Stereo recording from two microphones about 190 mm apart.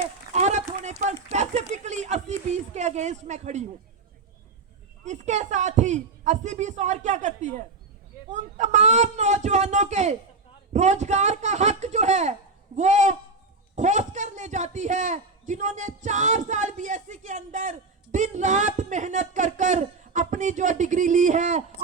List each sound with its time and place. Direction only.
0.0 s a sound: 35° right (ahead or behind)
1.3 s speech: 35° right (ahead or behind)
5.0 s a man's voice: 40° right (ahead or behind)